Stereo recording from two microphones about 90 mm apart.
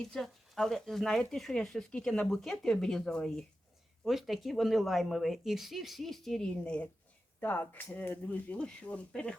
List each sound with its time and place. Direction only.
0.0 s speech: 5° left (ahead or behind)
7.3 s speech: 20° left (ahead or behind)